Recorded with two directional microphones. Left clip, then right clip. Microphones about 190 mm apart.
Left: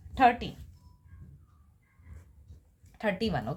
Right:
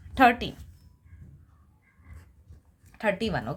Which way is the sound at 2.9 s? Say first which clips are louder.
Right 3 dB; 10° right (ahead or behind).